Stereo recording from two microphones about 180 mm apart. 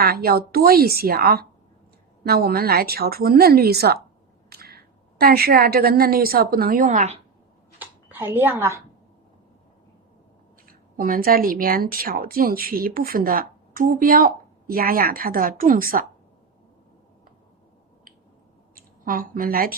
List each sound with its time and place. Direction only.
0.0 s a woman's voice: 60° right (ahead or behind); by 7.2 s 40° right (ahead or behind)
7.8 s a sound: 10° right (ahead or behind)
10.7 s speech: 50° right (ahead or behind)
18.7 s speech: 50° right (ahead or behind)